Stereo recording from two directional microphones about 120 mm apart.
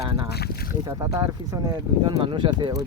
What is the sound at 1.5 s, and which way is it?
Speech, 25° right (ahead or behind).